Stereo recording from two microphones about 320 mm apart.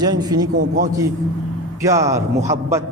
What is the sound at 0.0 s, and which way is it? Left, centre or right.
Speech, centre.